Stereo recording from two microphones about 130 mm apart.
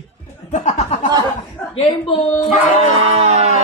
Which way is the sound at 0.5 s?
65° left (ahead or behind).